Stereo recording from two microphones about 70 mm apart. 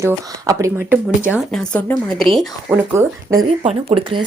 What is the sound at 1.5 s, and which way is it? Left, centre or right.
Speech, centre.